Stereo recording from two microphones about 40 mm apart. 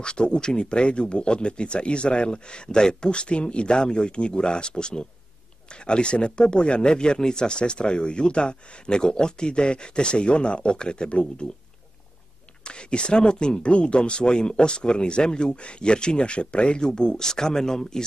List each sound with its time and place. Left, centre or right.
0.0 s speech: left
12.6 s speech: left